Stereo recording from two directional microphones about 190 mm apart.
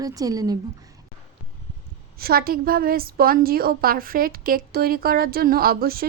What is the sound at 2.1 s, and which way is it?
A woman's voice, 50° right (ahead or behind).